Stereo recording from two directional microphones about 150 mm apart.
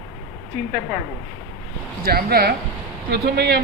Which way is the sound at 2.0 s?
90° right.